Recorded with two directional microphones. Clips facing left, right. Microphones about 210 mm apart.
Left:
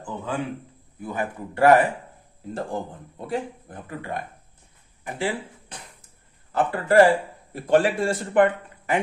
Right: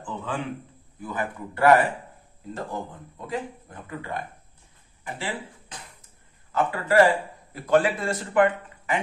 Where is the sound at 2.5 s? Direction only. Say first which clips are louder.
Left 3 dB; 30° left (ahead or behind).